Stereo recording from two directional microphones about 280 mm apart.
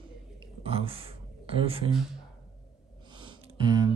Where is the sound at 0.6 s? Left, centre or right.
Right.